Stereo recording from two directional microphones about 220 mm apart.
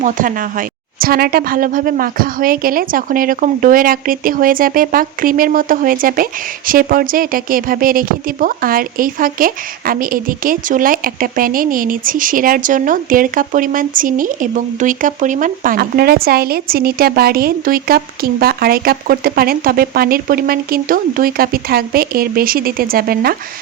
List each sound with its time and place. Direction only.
0.0 s a woman's voice: 40° right (ahead or behind)